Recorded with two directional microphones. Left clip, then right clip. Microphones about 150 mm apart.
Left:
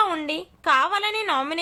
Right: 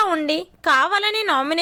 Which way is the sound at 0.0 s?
20° right (ahead or behind).